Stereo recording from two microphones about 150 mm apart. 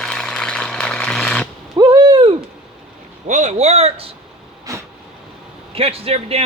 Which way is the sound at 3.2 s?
50° right (ahead or behind).